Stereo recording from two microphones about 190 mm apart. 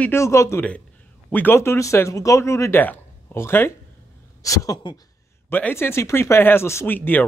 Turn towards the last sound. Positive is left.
turn(degrees=10)  # may be behind; listen again after turning